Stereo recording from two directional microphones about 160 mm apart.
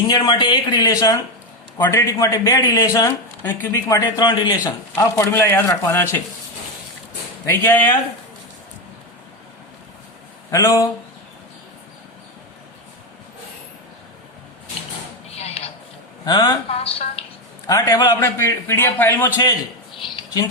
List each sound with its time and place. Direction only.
0.1 s speech: 25° left (ahead or behind)
7.4 s speech: 15° left (ahead or behind)
10.5 s speech: 20° left (ahead or behind)
15.4 s a sound: 40° left (ahead or behind)
16.2 s speech: 25° left (ahead or behind)
16.6 s a woman's voice: 40° left (ahead or behind)
17.7 s speech: 25° left (ahead or behind)